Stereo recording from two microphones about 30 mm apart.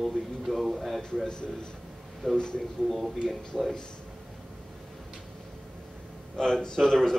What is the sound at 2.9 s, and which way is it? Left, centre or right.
Speech, centre.